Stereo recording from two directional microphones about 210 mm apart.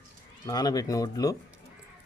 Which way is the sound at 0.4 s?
20° left (ahead or behind).